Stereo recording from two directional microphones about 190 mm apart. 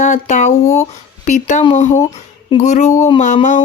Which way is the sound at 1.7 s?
40° left (ahead or behind).